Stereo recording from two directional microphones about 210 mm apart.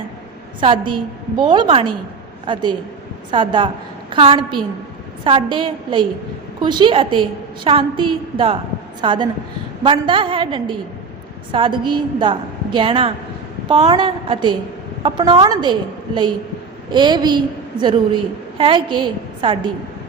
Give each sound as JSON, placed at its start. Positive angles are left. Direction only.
{"t": 0.6, "sound": "a woman's voice", "side_deg": -25}
{"t": 16.9, "sound": "a woman's voice", "side_deg": -20}